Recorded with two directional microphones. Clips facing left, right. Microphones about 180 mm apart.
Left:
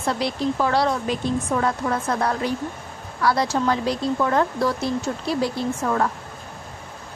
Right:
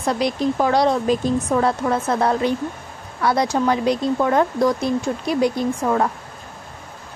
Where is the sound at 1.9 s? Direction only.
25° right (ahead or behind).